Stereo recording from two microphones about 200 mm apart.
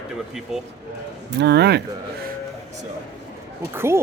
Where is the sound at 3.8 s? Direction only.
15° right (ahead or behind).